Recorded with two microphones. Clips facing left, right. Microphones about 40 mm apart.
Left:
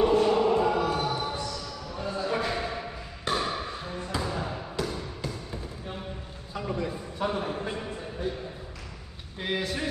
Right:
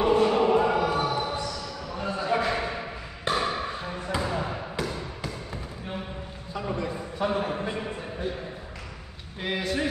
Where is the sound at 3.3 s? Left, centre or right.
Centre.